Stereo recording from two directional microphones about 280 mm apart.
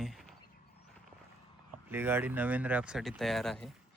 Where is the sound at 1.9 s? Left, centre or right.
Centre.